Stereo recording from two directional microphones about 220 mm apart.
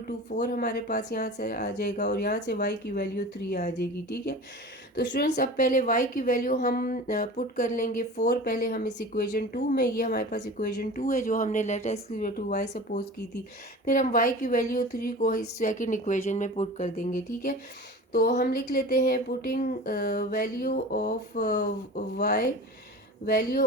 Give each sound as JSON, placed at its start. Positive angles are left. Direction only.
{"t": 0.4, "sound": "a woman's voice", "side_deg": 45}